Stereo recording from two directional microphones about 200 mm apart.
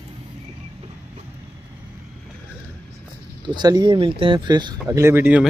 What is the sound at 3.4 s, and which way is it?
Speech, 20° right (ahead or behind).